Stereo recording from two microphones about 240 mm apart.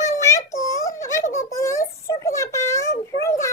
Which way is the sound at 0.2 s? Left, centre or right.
Centre.